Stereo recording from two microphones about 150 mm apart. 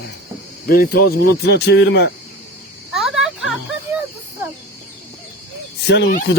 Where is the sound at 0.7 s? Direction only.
90° left.